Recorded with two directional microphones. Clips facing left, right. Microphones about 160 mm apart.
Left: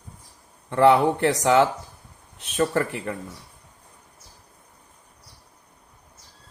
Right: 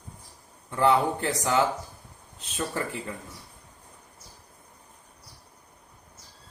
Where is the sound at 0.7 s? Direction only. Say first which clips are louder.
Left 6 dB; 70° left (ahead or behind).